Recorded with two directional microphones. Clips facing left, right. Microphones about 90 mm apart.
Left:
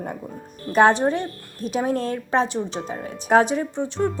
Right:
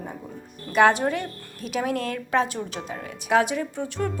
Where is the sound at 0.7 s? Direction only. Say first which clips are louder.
Left 2 dB; 30° left (ahead or behind).